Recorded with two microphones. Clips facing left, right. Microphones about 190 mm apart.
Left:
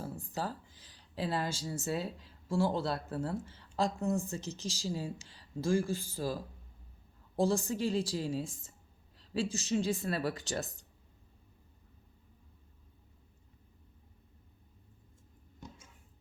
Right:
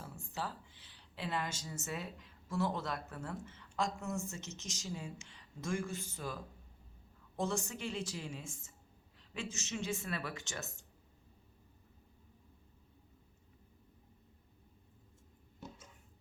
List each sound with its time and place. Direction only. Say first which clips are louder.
0.0 s speech: left 5 dB; 40° left (ahead or behind)